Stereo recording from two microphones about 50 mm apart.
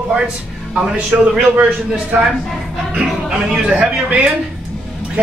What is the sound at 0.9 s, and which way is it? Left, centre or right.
Speech, right.